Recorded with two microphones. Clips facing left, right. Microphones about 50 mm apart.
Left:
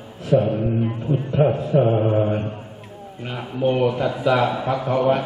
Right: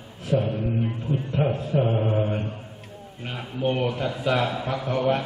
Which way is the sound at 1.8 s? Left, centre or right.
Centre.